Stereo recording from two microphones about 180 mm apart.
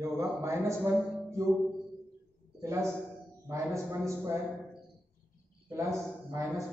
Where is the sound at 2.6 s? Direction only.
15° right (ahead or behind).